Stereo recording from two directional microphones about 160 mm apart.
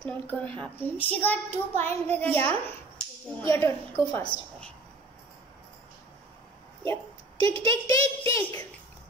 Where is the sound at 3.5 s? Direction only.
15° left (ahead or behind).